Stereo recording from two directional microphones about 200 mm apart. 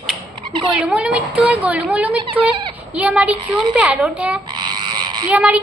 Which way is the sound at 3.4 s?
25° right (ahead or behind).